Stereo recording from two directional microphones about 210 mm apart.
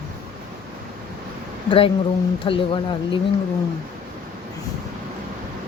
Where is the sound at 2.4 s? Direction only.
20° left (ahead or behind).